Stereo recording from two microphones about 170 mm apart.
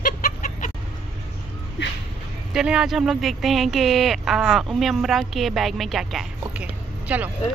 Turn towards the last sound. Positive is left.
turn(degrees=-10)  # may be behind; listen again after turning